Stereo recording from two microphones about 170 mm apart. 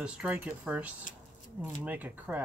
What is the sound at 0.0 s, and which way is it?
Speech, 10° right (ahead or behind).